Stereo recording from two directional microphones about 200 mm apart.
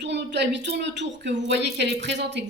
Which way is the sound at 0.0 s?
60° right (ahead or behind).